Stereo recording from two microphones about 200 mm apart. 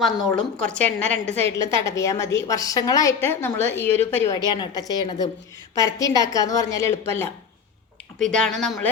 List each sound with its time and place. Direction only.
0.3 s a woman's voice: 5° left (ahead or behind)
4.5 s a woman's voice: 20° left (ahead or behind)
8.3 s speech: 5° left (ahead or behind)